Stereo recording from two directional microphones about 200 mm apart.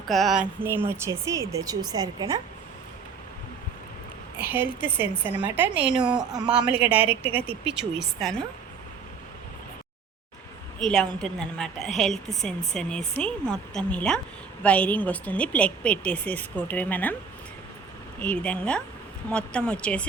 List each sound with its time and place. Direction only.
0.1 s speech: centre (ahead or behind)
0.6 s a woman's voice: 10° right (ahead or behind)
4.4 s a woman's voice: 10° right (ahead or behind)
6.1 s a man's voice: 20° right (ahead or behind)
6.5 s a woman's voice: 5° right (ahead or behind)
10.8 s speech: 5° left (ahead or behind)
18.2 s speech: 5° left (ahead or behind)